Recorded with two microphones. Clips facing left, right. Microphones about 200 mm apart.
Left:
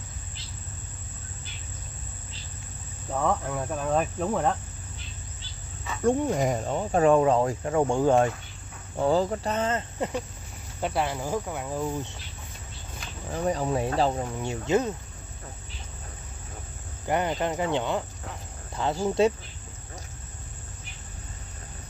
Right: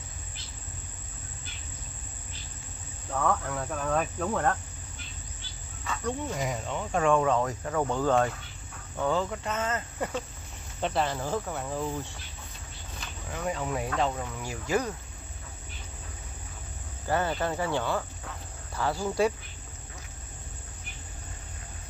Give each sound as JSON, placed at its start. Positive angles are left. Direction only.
{"t": 3.1, "sound": "speech", "side_deg": 20}
{"t": 6.0, "sound": "speech", "side_deg": 50}
{"t": 8.9, "sound": "speech", "side_deg": 35}
{"t": 10.8, "sound": "speech", "side_deg": 10}
{"t": 13.3, "sound": "speech", "side_deg": 35}
{"t": 17.1, "sound": "speech", "side_deg": 20}